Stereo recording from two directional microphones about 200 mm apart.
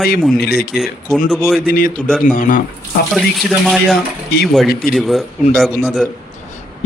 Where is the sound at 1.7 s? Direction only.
45° left (ahead or behind).